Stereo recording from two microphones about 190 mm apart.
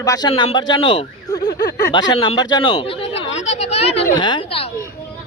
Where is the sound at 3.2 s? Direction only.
35° left (ahead or behind).